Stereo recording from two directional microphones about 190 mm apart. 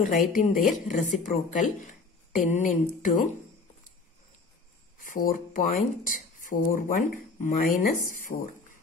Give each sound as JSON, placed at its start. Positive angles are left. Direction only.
{"t": 0.0, "sound": "a woman's voice", "side_deg": 40}
{"t": 5.0, "sound": "a woman's voice", "side_deg": 45}